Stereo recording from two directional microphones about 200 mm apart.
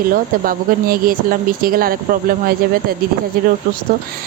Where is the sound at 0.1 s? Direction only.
45° right (ahead or behind).